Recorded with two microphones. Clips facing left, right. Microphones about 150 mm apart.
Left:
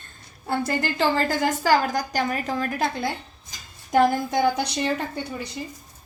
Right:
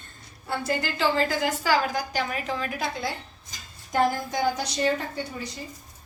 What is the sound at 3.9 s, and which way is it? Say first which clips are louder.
Speech: left 5 dB; 65° left (ahead or behind).